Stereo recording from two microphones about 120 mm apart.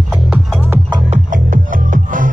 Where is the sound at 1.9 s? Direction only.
90° right.